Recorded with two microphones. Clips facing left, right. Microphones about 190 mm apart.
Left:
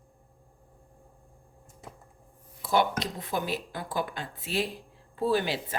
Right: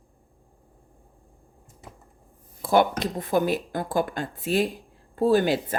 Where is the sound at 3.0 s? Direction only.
50° right (ahead or behind).